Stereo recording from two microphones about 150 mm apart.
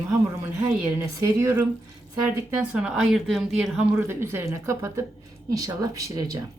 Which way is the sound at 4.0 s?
15° right (ahead or behind).